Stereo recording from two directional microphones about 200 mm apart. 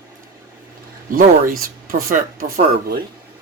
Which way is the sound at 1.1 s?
45° right (ahead or behind).